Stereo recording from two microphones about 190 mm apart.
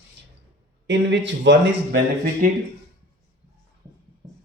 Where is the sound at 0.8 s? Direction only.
70° right (ahead or behind).